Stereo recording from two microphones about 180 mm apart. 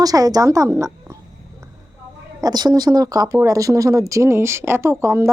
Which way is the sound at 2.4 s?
25° right (ahead or behind).